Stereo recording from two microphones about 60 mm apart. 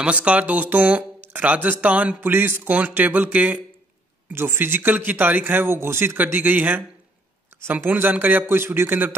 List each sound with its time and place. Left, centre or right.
0.0 s speech: right
2.1 s a man's voice: right
4.3 s a man's voice: right
6.1 s a man's voice: right